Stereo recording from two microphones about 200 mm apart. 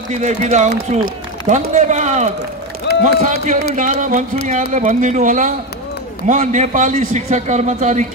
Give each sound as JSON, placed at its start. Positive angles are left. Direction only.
{"t": 0.1, "sound": "speech", "side_deg": -35}